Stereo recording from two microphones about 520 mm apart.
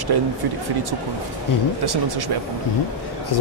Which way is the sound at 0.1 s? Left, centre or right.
Right.